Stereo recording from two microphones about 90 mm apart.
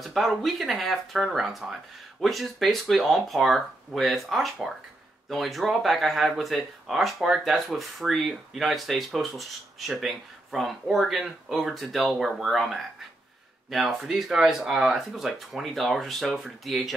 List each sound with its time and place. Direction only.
0.0 s speech: centre (ahead or behind)